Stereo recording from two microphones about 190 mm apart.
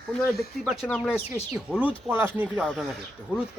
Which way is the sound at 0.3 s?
Centre (ahead or behind).